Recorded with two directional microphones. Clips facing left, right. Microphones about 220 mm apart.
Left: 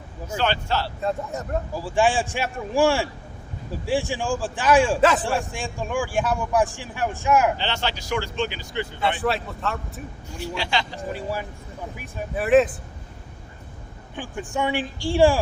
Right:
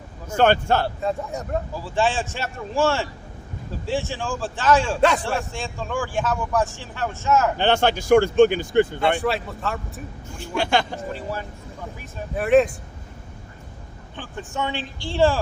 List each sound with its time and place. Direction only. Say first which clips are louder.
0.3 s speech: right 7 dB; 50° right (ahead or behind)
1.0 s speech: right 1 dB; centre (ahead or behind)
1.7 s speech: left 3 dB; 15° left (ahead or behind)
4.9 s speech: even; centre (ahead or behind)
5.2 s speech: left 1 dB; 15° left (ahead or behind)
7.6 s speech: right 8 dB; 50° right (ahead or behind)
9.2 s speech: even; centre (ahead or behind)
10.3 s speech: right 5 dB; 50° right (ahead or behind)
11.1 s speech: left 5 dB; 10° left (ahead or behind)
12.4 s speech: right 1 dB; centre (ahead or behind)
14.2 s speech: left 2 dB; 15° left (ahead or behind)